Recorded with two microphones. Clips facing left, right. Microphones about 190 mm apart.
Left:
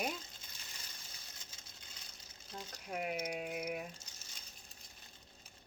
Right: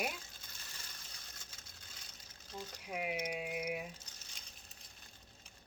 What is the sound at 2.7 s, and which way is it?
A woman's voice, 10° right (ahead or behind).